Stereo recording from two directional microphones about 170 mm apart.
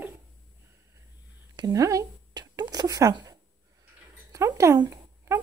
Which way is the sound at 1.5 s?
20° right (ahead or behind).